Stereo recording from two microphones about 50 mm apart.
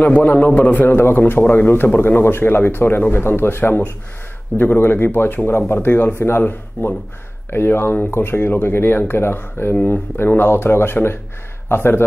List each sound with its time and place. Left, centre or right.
0.0 s a man's voice: left
0.8 s a man's voice: left
6.1 s speech: left